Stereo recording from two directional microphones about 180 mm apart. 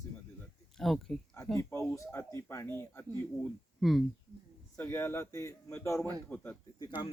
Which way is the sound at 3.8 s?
Centre (ahead or behind).